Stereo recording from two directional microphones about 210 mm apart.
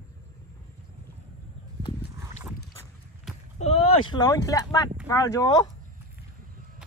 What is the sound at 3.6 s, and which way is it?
Speech, 30° left (ahead or behind).